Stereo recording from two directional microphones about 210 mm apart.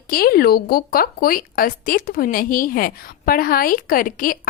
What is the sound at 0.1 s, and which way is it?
Speech, 45° left (ahead or behind).